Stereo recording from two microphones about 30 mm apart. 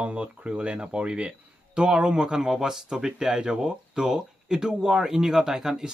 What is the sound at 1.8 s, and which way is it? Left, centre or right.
Speech, right.